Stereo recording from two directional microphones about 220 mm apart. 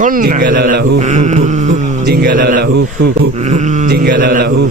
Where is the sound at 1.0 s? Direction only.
30° right (ahead or behind); by 3.3 s 50° right (ahead or behind).